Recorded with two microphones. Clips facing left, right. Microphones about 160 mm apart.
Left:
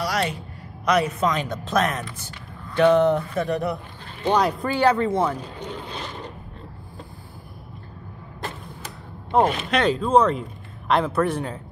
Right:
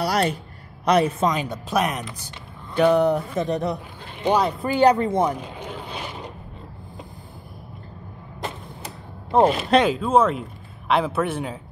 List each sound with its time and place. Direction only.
0.0 s a man's voice: 35° right (ahead or behind)
1.3 s speech: 10° right (ahead or behind)
4.4 s a man's voice: centre (ahead or behind)
4.6 s a sound: 15° right (ahead or behind)
9.4 s a man's voice: 35° right (ahead or behind)
9.8 s a man's voice: 5° right (ahead or behind)